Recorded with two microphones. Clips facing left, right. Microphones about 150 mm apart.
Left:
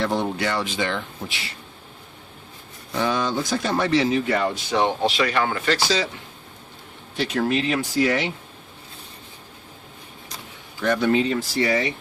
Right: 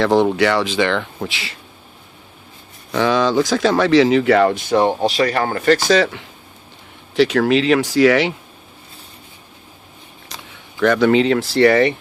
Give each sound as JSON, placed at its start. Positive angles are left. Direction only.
{"t": 0.0, "sound": "speech", "side_deg": -90}
{"t": 2.9, "sound": "speech", "side_deg": -90}
{"t": 4.5, "sound": "speech", "side_deg": -50}
{"t": 7.2, "sound": "speech", "side_deg": -90}
{"t": 10.8, "sound": "speech", "side_deg": -90}